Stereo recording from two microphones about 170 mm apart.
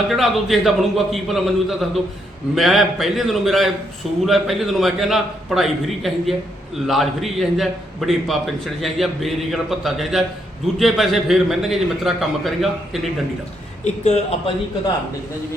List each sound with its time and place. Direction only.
0.1 s a man's voice: centre (ahead or behind)
13.8 s speech: 40° left (ahead or behind)